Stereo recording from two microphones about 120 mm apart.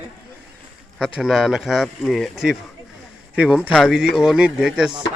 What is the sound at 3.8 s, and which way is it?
A man's voice, 5° right (ahead or behind).